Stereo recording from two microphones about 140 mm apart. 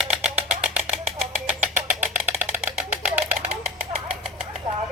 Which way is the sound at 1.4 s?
10° right (ahead or behind).